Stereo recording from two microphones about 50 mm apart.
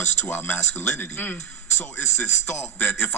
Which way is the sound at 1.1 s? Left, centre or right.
Left.